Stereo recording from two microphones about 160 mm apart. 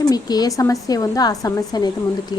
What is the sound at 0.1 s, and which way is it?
Speech, 25° left (ahead or behind).